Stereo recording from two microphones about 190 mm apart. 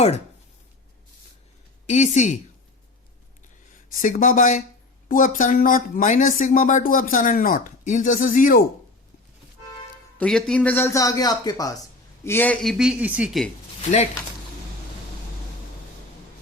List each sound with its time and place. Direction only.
1.9 s speech: 35° left (ahead or behind)
3.9 s speech: 45° left (ahead or behind)
10.2 s speech: 5° left (ahead or behind)
12.7 s speech: 5° right (ahead or behind)